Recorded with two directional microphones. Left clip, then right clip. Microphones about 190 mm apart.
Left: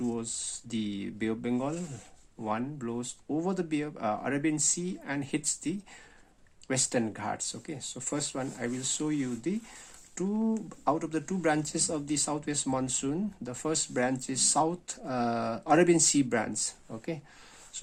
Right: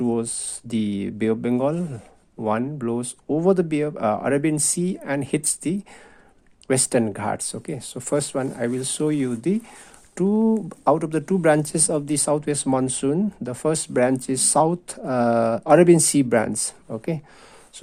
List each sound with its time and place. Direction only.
0.0 s speech: 50° right (ahead or behind)